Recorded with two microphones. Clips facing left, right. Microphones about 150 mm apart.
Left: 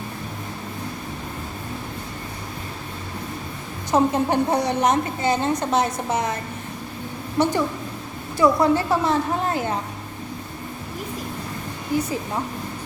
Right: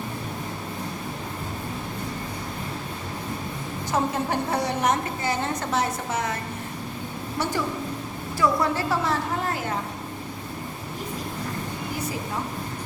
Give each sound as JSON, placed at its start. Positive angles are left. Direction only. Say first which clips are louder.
{"t": 3.9, "sound": "a woman's voice", "louder": "left 6 dB", "side_deg": 20}
{"t": 7.4, "sound": "a woman's voice", "louder": "left 6 dB", "side_deg": 20}